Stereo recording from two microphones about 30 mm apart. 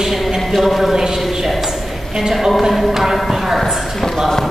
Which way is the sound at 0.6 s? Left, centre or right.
Centre.